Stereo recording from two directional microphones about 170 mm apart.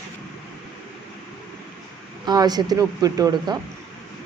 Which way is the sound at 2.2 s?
25° right (ahead or behind).